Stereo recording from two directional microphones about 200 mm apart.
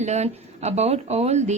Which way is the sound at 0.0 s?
35° right (ahead or behind).